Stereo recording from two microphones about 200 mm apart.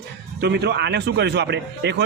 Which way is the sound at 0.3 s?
55° right (ahead or behind).